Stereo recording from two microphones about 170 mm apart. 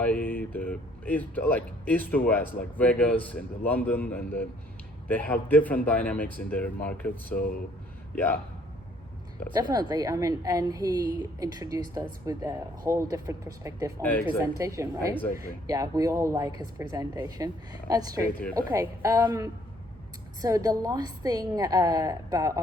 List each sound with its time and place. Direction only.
0.0 s speech: 10° left (ahead or behind)
7.3 s speech: 60° left (ahead or behind)
8.1 s speech: 10° left (ahead or behind)
9.5 s a woman's voice: 25° right (ahead or behind)